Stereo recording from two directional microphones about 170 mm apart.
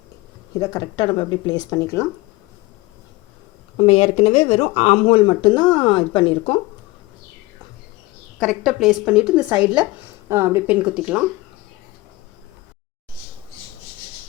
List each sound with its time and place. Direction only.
0.6 s speech: 20° left (ahead or behind)
3.8 s speech: 35° left (ahead or behind)
8.4 s a woman's voice: centre (ahead or behind)